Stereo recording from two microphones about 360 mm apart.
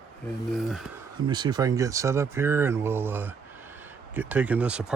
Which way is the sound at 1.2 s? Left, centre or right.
Centre.